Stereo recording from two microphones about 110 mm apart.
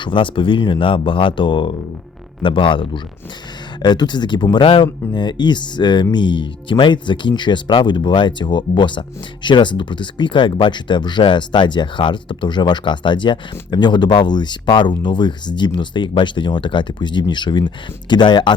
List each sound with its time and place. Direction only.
0.0 s speech: 50° left (ahead or behind)